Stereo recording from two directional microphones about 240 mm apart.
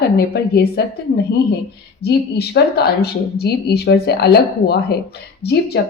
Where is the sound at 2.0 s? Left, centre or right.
Left.